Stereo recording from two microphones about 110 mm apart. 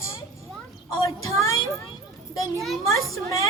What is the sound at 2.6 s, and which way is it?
Speech, centre (ahead or behind).